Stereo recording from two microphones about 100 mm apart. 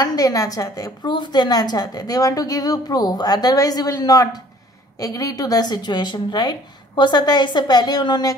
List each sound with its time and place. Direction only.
0.0 s a woman's voice: 40° left (ahead or behind)